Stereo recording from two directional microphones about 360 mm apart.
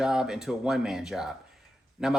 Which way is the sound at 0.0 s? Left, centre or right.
Centre.